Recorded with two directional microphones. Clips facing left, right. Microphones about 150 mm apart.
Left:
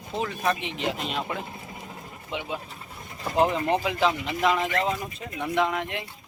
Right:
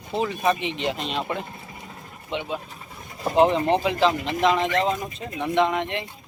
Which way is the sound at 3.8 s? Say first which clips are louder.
Right 3 dB; 5° left (ahead or behind).